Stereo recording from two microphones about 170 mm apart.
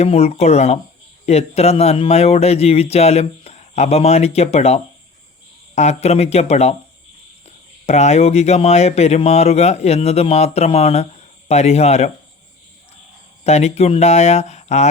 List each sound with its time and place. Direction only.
0.0 s speech: 40° left (ahead or behind)
7.9 s speech: 40° left (ahead or behind)
13.4 s speech: 40° left (ahead or behind)